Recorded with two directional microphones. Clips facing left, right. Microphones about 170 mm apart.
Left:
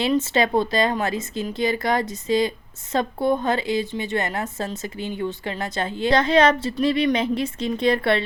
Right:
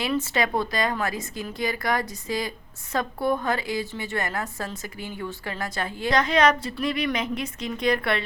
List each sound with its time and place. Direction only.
0.0 s a woman's voice: 25° left (ahead or behind)